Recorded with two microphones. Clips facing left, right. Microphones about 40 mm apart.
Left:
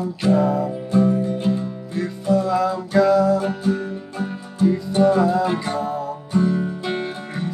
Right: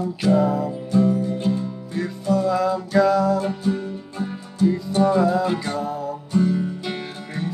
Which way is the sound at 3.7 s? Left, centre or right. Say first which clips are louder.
Left 2 dB; left.